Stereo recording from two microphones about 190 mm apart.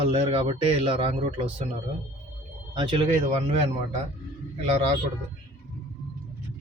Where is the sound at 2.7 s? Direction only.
25° right (ahead or behind).